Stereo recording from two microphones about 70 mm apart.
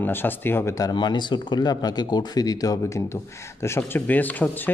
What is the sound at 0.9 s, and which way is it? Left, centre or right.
Speech, left.